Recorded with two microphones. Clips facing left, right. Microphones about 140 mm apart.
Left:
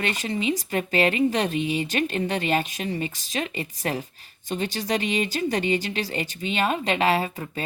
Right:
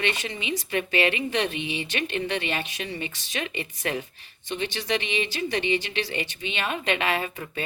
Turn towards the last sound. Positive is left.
turn(degrees=35)  # may be behind; listen again after turning